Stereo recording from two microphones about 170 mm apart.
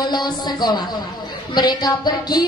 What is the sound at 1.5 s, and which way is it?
Speech, 25° left (ahead or behind).